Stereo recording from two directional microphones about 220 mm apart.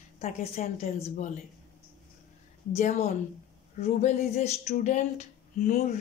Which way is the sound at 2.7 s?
30° left (ahead or behind).